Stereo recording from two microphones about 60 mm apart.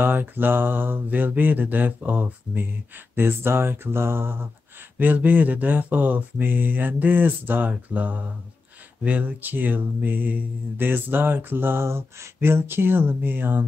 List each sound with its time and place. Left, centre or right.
0.0 s speech: right
4.9 s a sound: right
9.0 s speech: right